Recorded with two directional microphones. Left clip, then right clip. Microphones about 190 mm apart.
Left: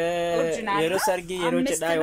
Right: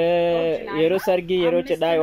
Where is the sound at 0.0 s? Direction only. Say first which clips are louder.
Right 5 dB; 15° right (ahead or behind).